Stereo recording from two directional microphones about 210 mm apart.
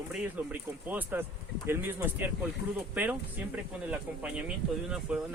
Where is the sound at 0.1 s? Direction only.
10° right (ahead or behind).